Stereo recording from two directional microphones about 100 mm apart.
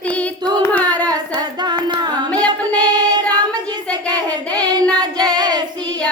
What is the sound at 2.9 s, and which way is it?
Female singing, 45° right (ahead or behind).